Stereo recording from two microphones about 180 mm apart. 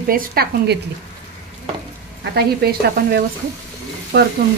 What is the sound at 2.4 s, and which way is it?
Speech, 60° right (ahead or behind).